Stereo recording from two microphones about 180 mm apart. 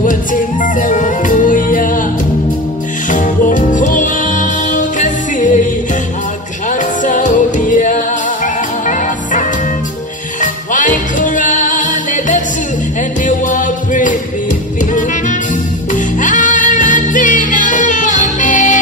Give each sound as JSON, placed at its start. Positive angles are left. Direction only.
{"t": 0.0, "sound": "music", "side_deg": 45}
{"t": 3.1, "sound": "music", "side_deg": 45}
{"t": 7.1, "sound": "music", "side_deg": 45}
{"t": 15.9, "sound": "music", "side_deg": 45}